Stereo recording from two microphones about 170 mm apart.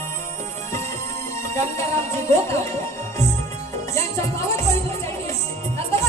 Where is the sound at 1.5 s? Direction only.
15° left (ahead or behind).